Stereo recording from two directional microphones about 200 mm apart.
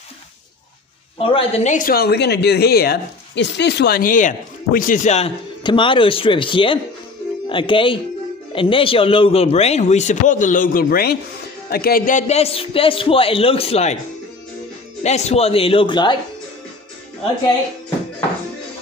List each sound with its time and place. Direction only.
1.1 s a man's voice: 25° left (ahead or behind)
15.0 s a man's voice: 35° left (ahead or behind)